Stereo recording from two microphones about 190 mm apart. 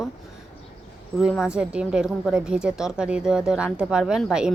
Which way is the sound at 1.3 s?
5° right (ahead or behind).